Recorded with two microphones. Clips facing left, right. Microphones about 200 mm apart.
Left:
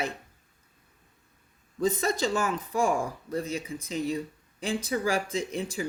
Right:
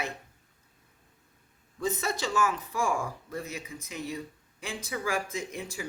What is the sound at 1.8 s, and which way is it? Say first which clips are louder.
Speech: left 5 dB; 35° left (ahead or behind).